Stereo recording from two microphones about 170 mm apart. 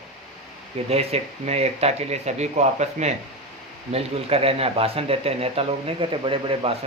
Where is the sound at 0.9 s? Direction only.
40° right (ahead or behind).